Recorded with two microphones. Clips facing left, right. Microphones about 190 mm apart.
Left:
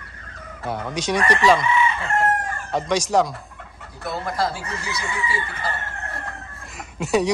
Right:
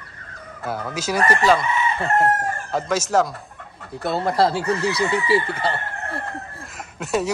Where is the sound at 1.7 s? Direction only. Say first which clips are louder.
Even; 40° right (ahead or behind).